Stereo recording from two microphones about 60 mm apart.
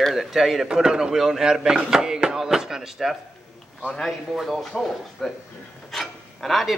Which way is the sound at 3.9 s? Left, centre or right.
Centre.